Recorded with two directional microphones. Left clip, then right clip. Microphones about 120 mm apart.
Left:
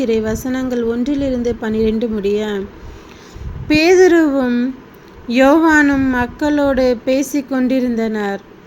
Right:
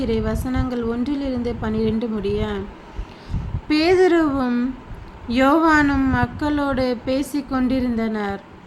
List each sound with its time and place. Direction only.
0.0 s a woman's voice: 35° left (ahead or behind)
3.7 s a woman's voice: 35° left (ahead or behind)